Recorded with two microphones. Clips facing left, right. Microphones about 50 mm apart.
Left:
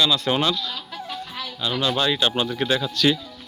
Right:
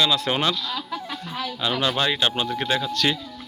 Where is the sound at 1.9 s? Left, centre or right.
Right.